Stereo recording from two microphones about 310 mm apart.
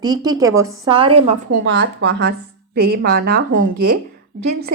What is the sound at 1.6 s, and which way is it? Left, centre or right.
A woman's voice, right.